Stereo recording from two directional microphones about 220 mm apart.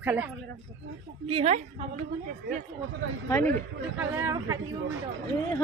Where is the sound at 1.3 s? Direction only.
30° right (ahead or behind).